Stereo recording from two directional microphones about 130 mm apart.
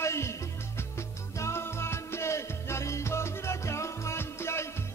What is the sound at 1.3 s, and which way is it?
Music, 20° left (ahead or behind).